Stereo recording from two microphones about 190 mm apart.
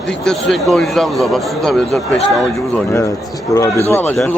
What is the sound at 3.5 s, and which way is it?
Speech, 15° left (ahead or behind).